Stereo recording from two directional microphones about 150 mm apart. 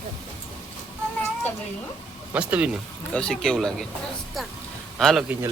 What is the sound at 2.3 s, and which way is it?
Speech, 10° right (ahead or behind).